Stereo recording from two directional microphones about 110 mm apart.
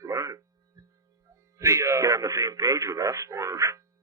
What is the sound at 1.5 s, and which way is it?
A man's voice, 30° right (ahead or behind).